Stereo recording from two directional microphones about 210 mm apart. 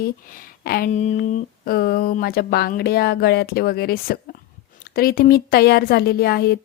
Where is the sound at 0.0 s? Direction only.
40° left (ahead or behind).